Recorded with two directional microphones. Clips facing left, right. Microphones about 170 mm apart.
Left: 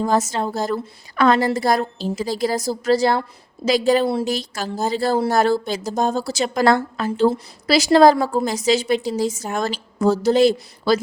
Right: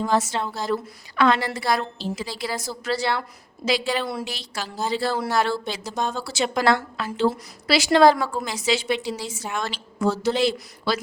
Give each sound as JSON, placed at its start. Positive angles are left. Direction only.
{"t": 0.0, "sound": "a woman's voice", "side_deg": 40}
{"t": 4.0, "sound": "a woman's voice", "side_deg": 30}
{"t": 4.3, "sound": "a woman's voice", "side_deg": 45}